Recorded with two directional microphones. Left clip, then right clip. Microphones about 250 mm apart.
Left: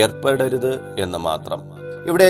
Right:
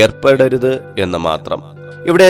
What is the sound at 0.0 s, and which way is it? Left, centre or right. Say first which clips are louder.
Speech: right 7 dB; right.